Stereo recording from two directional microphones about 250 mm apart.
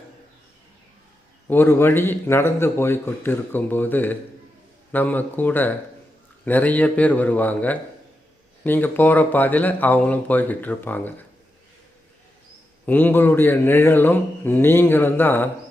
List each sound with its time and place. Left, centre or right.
1.5 s a man's voice: centre
12.8 s a man's voice: centre